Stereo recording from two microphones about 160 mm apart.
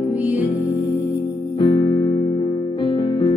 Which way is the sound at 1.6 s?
30° left (ahead or behind).